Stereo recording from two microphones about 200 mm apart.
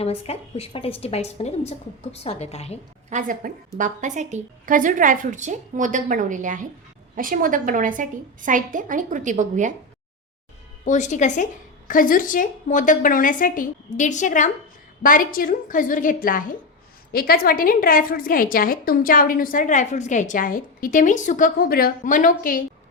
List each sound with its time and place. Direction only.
0.0 s a woman's voice: 30° left (ahead or behind)
3.1 s a woman's voice: 40° right (ahead or behind)
10.8 s a woman's voice: 35° left (ahead or behind)